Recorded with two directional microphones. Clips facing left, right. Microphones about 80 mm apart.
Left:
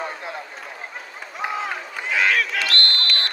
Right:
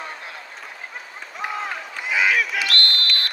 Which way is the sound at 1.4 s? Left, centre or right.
Centre.